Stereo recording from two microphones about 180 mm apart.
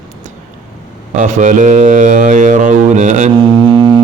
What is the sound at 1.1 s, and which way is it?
Mantra, 45° right (ahead or behind).